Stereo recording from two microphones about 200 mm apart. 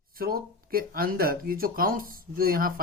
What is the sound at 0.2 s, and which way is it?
Speech, 45° right (ahead or behind).